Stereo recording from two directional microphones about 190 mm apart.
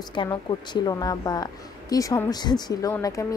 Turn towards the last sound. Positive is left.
turn(degrees=15)  # may be behind; listen again after turning